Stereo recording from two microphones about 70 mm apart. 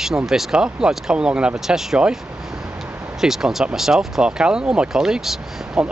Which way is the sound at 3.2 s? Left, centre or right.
Centre.